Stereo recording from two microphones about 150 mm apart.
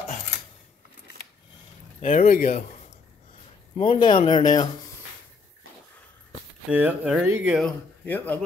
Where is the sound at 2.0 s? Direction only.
55° left (ahead or behind).